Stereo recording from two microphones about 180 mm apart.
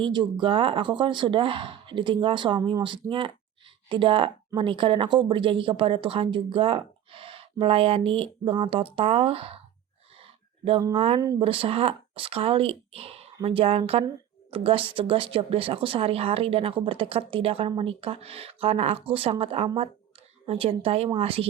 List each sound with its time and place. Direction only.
0.0 s speech: 25° right (ahead or behind)
10.7 s speech: 25° right (ahead or behind)